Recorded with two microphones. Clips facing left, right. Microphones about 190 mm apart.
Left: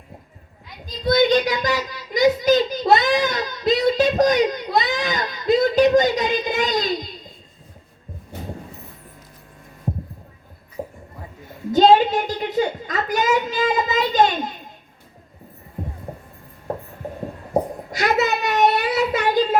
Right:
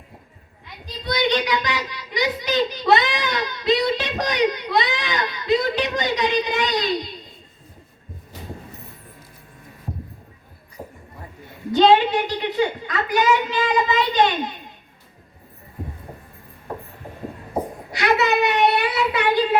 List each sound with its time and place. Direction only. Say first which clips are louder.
1.0 s speech: left 5 dB; 45° left (ahead or behind)
10.8 s music: left 6 dB; 25° left (ahead or behind)
11.7 s speech: left 1 dB; 45° left (ahead or behind)
17.9 s a child's voice: right 1 dB; 45° left (ahead or behind)